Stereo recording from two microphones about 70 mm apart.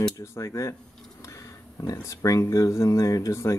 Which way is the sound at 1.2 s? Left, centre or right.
Left.